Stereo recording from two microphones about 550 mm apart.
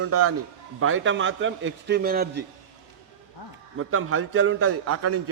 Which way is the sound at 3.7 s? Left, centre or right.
Right.